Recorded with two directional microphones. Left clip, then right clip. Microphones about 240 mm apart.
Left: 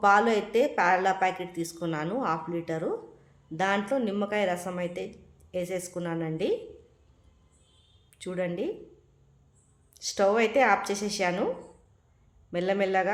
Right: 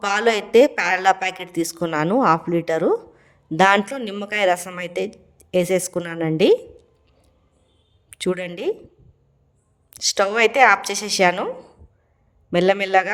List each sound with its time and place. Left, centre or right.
0.0 s a woman's voice: right
8.1 s speech: right
9.9 s a woman's voice: right